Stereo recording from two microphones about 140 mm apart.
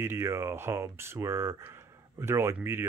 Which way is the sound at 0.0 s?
20° right (ahead or behind).